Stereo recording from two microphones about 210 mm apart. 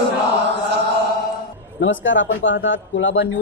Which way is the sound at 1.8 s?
60° left (ahead or behind).